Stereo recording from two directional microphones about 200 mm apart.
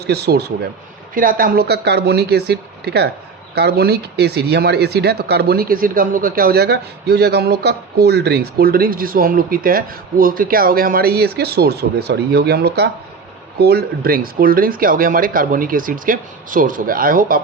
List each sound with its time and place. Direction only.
0.0 s speech: 55° right (ahead or behind)